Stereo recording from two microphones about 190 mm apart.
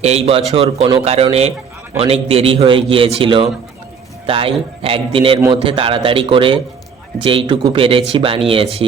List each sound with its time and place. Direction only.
0.0 s speech: 35° right (ahead or behind)